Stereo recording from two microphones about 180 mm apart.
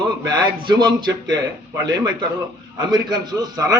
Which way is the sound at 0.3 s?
25° right (ahead or behind).